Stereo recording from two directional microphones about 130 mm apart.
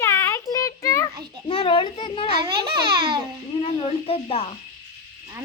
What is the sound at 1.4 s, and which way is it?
Speech, 45° left (ahead or behind).